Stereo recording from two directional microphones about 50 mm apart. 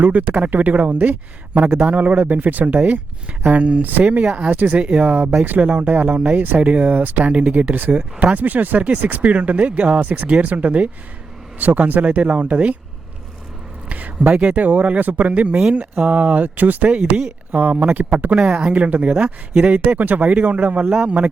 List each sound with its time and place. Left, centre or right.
0.0 s speech: right
3.8 s speech: right
6.6 s speech: right
13.9 s speech: right